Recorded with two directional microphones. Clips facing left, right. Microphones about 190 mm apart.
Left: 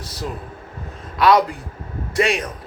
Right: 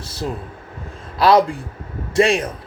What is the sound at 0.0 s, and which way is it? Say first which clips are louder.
Vehicle: right 2 dB; 30° right (ahead or behind).